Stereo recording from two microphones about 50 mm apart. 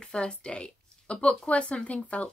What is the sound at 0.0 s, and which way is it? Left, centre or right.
Speech, centre.